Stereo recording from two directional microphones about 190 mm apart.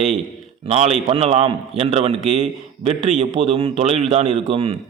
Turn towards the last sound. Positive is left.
turn(degrees=-30)  # may be behind; listen again after turning